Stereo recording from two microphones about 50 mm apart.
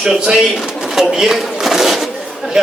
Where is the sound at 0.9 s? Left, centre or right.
Centre.